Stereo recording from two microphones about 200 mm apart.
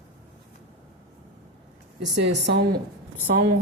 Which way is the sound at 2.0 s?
65° right (ahead or behind).